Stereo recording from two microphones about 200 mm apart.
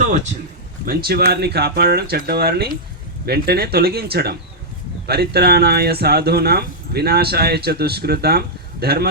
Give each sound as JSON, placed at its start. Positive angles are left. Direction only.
{"t": 0.9, "sound": "speech", "side_deg": -50}